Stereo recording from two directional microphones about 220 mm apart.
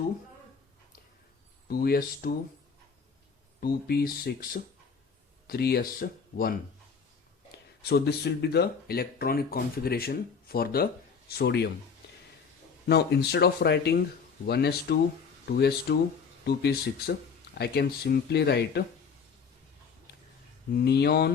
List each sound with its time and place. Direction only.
1.6 s speech: 45° left (ahead or behind)
3.6 s speech: 45° left (ahead or behind)
7.9 s speech: 45° left (ahead or behind)
12.9 s speech: 45° left (ahead or behind)
20.7 s speech: 50° left (ahead or behind)